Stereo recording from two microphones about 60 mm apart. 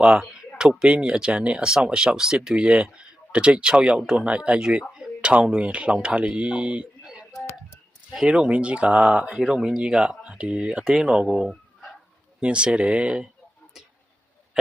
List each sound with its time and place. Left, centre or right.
0.0 s speech: centre
13.7 s tick-tock: centre
14.5 s a sound: centre